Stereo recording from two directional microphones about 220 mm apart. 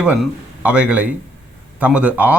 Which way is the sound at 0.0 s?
5° right (ahead or behind).